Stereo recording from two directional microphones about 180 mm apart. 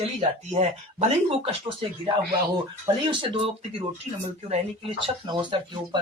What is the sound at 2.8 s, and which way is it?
Speech, 25° right (ahead or behind).